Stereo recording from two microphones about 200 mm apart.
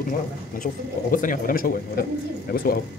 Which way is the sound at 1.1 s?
45° left (ahead or behind).